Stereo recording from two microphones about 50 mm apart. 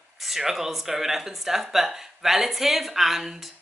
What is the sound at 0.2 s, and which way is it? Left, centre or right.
A woman's voice, centre.